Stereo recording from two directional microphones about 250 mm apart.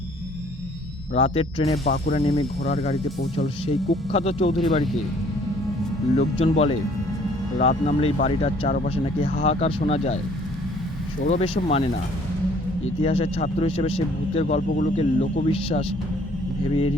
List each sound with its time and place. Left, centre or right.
1.1 s a man's voice: left
6.1 s a man's voice: left
11.3 s a man's voice: left
13.0 s a man's voice: left